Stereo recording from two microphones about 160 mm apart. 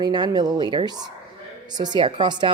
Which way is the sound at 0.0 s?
25° right (ahead or behind).